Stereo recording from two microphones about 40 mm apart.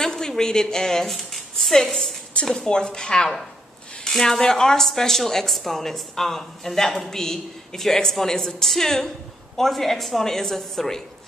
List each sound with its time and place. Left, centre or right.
0.0 s a woman's voice: centre
1.1 s a sound: centre
2.4 s a woman's voice: centre